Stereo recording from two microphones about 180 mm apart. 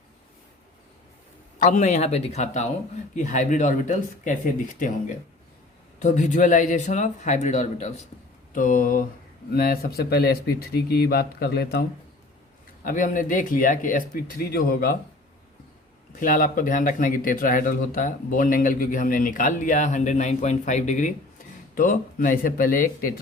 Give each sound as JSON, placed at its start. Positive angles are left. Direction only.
{"t": 1.5, "sound": "speech", "side_deg": 45}
{"t": 8.5, "sound": "speech", "side_deg": 50}
{"t": 12.8, "sound": "speech", "side_deg": 50}
{"t": 16.2, "sound": "speech", "side_deg": 50}